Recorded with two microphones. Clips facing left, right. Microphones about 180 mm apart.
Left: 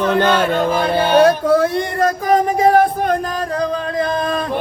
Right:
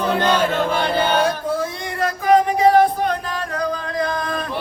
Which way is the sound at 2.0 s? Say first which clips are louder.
Even; 45° left (ahead or behind).